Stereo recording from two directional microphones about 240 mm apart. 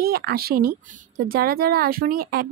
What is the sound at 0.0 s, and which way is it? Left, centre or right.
Speech, right.